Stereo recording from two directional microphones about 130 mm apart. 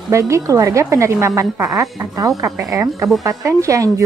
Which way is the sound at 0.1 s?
25° right (ahead or behind).